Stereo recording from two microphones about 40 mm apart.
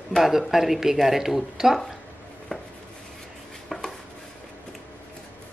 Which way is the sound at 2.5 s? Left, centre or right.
Centre.